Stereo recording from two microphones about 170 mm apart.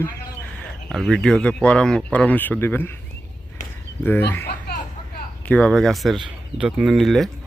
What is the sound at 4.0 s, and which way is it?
Speech, 10° left (ahead or behind).